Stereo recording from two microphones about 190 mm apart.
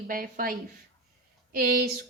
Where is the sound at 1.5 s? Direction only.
50° right (ahead or behind).